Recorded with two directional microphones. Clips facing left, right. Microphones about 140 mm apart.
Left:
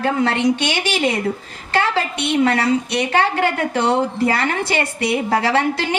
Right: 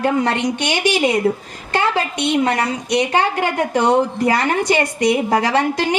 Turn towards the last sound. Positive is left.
turn(degrees=-15)  # may be behind; listen again after turning